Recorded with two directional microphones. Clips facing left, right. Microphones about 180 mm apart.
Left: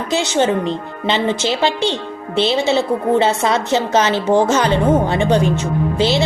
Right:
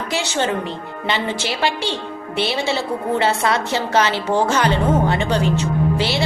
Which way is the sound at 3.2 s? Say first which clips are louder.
Left 3 dB; 20° left (ahead or behind).